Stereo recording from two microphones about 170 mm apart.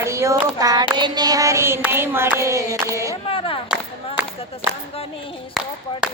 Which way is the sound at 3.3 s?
30° left (ahead or behind).